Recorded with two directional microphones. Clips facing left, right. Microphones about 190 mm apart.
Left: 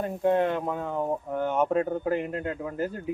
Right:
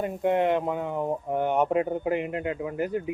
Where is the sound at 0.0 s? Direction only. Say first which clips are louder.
Even; 20° right (ahead or behind).